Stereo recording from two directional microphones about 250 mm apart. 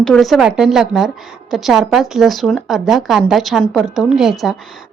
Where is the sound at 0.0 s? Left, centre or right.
Centre.